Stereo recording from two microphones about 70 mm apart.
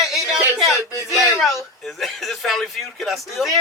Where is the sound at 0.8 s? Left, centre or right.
Left.